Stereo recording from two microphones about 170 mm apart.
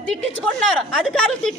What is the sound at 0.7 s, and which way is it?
Speech, 5° left (ahead or behind).